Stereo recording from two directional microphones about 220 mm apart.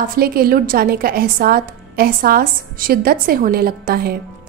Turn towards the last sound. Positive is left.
turn(degrees=-45)  # may be behind; listen again after turning